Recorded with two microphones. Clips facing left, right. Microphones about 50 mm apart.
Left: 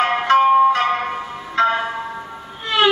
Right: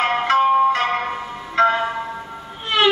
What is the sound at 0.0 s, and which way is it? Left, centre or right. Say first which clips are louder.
Music: left 2 dB; left.